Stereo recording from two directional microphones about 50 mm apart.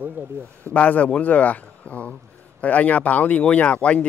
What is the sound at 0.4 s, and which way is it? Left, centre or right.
Speech, right.